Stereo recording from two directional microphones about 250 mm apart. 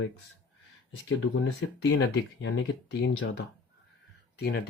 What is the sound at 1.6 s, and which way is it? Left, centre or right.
Speech, left.